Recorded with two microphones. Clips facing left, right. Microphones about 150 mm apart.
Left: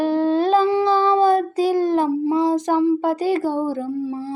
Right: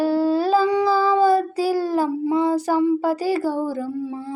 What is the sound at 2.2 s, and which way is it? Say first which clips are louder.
Mantra: left 1 dB; 35° left (ahead or behind).